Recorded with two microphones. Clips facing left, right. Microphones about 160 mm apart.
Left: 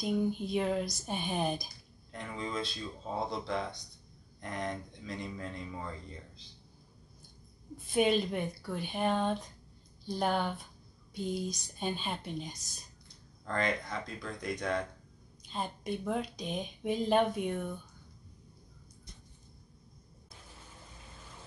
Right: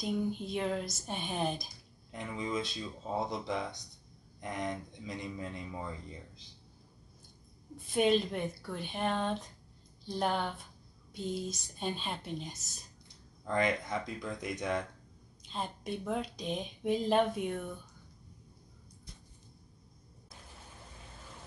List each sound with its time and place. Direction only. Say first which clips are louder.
0.0 s speech: left 2 dB; centre (ahead or behind)
2.1 s speech: right 1 dB; 15° right (ahead or behind)
7.9 s speech: even; 5° left (ahead or behind)
13.5 s speech: right 2 dB; 15° right (ahead or behind)
15.5 s speech: left 1 dB; centre (ahead or behind)